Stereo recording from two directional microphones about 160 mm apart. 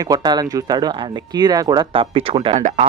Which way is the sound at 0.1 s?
25° right (ahead or behind).